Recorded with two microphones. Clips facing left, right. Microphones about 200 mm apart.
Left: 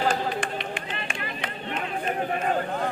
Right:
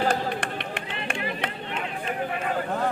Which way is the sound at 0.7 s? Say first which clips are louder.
Right 1 dB; 60° right (ahead or behind).